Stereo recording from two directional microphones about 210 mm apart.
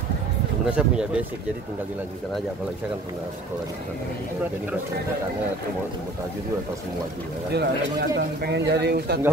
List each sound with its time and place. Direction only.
0.7 s speech: 5° right (ahead or behind)
7.5 s speech: 50° right (ahead or behind)